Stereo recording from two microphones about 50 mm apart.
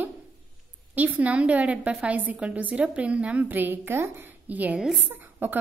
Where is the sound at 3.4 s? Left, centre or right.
Right.